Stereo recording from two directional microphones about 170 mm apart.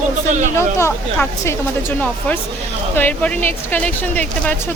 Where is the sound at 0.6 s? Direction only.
15° left (ahead or behind).